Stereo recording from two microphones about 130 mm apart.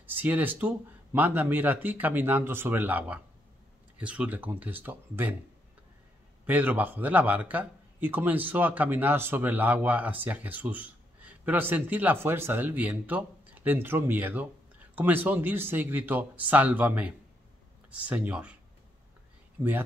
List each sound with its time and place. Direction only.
0.0 s speech: 15° right (ahead or behind)
6.4 s speech: 15° right (ahead or behind)